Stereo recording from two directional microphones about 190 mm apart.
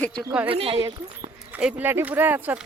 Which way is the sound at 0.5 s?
30° right (ahead or behind).